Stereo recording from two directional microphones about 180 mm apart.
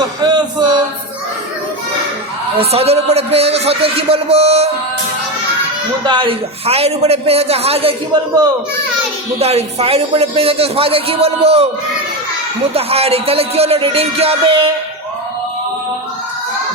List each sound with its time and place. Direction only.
0.0 s a sound: 25° right (ahead or behind)
2.6 s a man's voice: 35° right (ahead or behind)
6.1 s a man's voice: 25° right (ahead or behind)
12.7 s a man's voice: 35° right (ahead or behind)